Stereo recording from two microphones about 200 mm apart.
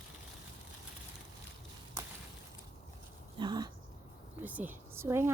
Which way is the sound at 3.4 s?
20° right (ahead or behind).